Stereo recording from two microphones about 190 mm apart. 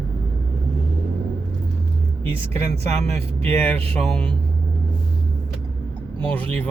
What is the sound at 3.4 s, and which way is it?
Speech, 10° left (ahead or behind).